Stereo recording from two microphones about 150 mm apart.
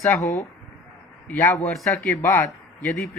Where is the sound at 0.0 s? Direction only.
20° left (ahead or behind).